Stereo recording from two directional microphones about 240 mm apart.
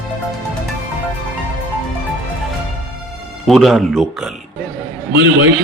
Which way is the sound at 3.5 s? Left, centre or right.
Centre.